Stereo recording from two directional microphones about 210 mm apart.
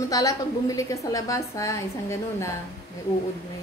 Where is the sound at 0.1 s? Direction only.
15° left (ahead or behind).